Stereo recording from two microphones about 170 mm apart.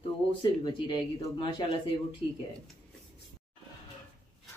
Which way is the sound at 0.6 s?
25° left (ahead or behind).